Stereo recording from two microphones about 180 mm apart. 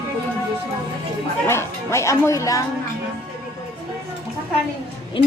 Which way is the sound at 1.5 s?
15° left (ahead or behind).